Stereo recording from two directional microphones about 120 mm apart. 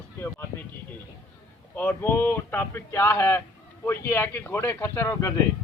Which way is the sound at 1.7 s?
15° left (ahead or behind).